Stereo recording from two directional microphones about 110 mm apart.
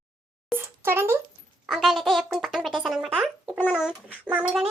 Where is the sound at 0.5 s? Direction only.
20° right (ahead or behind).